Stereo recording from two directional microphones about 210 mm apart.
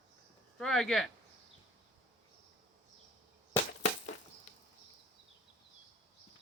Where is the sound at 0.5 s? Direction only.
Centre (ahead or behind).